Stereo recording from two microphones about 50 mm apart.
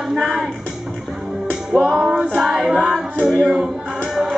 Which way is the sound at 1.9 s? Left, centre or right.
Centre.